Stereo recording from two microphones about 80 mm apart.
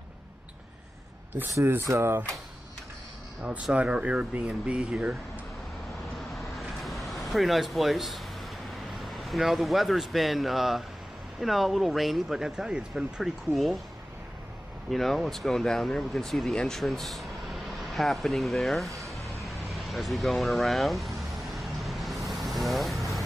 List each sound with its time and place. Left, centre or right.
1.5 s speech: right
3.7 s speech: centre
6.6 s a sound: centre
8.9 s speech: centre
14.9 s speech: centre
18.9 s a sound: right
19.2 s vehicle: centre